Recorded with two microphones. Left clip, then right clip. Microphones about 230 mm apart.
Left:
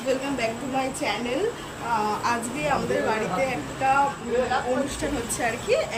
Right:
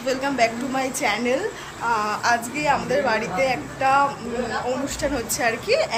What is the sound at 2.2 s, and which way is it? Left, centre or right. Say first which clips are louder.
A woman's voice: right 5 dB; centre.